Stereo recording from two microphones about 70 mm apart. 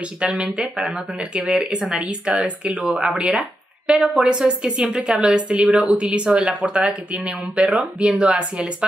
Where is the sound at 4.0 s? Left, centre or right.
Centre.